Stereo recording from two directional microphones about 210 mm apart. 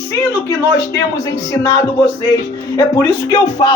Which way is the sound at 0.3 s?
15° left (ahead or behind).